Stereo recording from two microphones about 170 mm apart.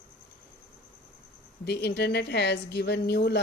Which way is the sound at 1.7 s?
75° left (ahead or behind).